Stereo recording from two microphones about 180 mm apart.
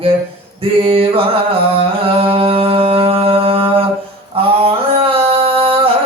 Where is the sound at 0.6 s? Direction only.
30° right (ahead or behind).